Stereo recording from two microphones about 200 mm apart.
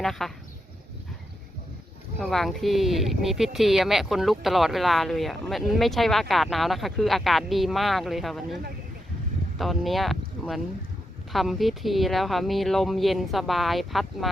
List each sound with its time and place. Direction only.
0.0 s speech: centre (ahead or behind)
2.2 s speech: centre (ahead or behind)